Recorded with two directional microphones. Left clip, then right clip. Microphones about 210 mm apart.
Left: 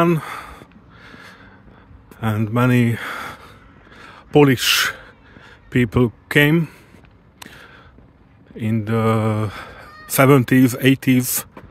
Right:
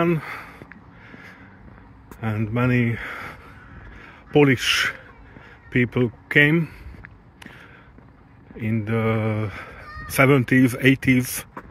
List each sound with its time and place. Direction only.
0.0 s speech: 25° left (ahead or behind)
1.0 s snort: 30° left (ahead or behind)
2.1 s speech: 30° left (ahead or behind)
3.9 s a sound: 30° left (ahead or behind)
8.5 s speech: 25° left (ahead or behind)